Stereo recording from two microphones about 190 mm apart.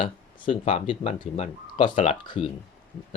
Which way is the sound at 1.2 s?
30° left (ahead or behind).